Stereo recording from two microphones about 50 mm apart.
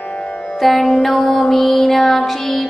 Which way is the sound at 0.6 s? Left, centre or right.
Centre.